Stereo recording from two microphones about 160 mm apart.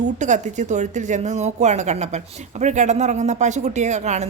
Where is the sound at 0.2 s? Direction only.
50° right (ahead or behind).